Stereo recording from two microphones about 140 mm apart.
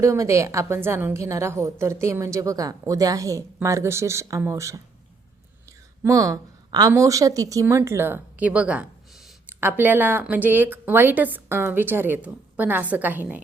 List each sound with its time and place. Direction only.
0.0 s a woman's voice: 20° right (ahead or behind)
6.0 s a woman's voice: 20° right (ahead or behind)